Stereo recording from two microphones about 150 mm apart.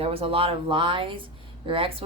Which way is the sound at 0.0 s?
40° right (ahead or behind).